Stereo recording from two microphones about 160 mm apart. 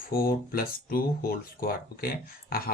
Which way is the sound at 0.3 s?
65° left (ahead or behind).